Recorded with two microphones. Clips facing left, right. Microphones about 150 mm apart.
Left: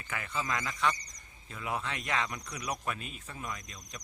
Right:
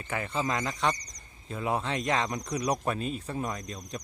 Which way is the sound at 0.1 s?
30° right (ahead or behind).